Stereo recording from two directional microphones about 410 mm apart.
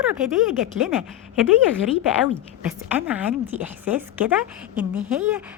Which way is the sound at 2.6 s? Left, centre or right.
Centre.